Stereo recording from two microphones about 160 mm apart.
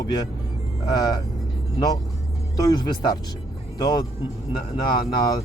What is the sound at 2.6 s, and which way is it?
Speech, 25° left (ahead or behind).